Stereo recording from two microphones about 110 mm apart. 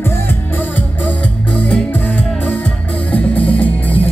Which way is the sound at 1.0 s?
15° left (ahead or behind).